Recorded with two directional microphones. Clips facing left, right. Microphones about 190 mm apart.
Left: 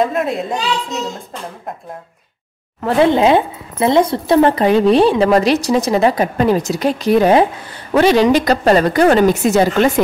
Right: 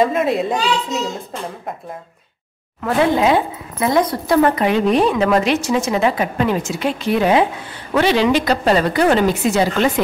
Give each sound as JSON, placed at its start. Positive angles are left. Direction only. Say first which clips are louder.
{"t": 0.0, "sound": "a woman's voice", "louder": "right 1 dB", "side_deg": 0}
{"t": 2.8, "sound": "a woman's voice", "louder": "left 3 dB", "side_deg": 25}